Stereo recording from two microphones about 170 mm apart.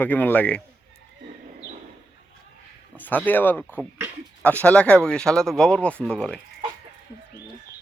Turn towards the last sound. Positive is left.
turn(degrees=5)  # may be behind; listen again after turning